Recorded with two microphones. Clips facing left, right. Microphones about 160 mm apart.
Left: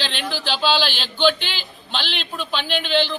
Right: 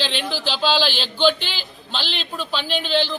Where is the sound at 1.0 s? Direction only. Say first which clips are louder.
Even; centre (ahead or behind).